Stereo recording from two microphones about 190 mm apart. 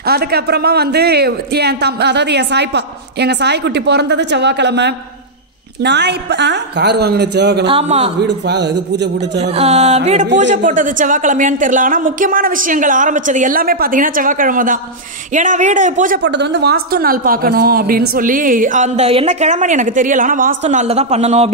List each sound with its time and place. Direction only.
0.0 s a man's voice: 55° right (ahead or behind)
7.6 s speech: 30° right (ahead or behind)
8.2 s a man's voice: 60° right (ahead or behind)
9.4 s a man's voice: 35° right (ahead or behind)
16.2 s a man's voice: 65° right (ahead or behind); by 21.5 s 35° right (ahead or behind)